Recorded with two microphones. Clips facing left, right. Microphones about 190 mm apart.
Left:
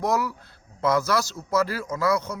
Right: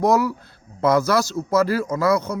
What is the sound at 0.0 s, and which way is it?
A man's voice, 35° right (ahead or behind).